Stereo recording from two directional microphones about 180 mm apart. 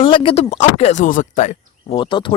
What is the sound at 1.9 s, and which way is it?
Speech, 25° left (ahead or behind).